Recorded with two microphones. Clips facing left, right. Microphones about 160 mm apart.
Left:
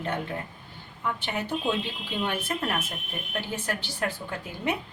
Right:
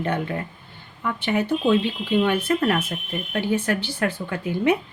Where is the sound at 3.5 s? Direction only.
65° right (ahead or behind).